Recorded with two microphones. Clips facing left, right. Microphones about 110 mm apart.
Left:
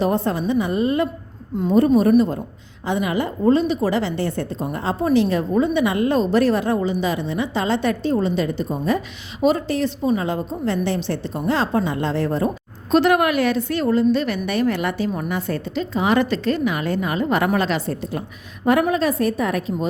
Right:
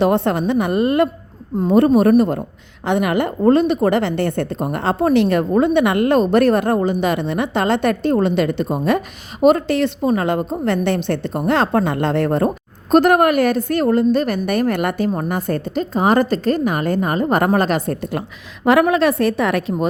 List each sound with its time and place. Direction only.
0.0 s a woman's voice: 70° right (ahead or behind)
9.4 s a woman's voice: 55° right (ahead or behind)
12.9 s a woman's voice: 50° right (ahead or behind)
18.6 s a woman's voice: 85° right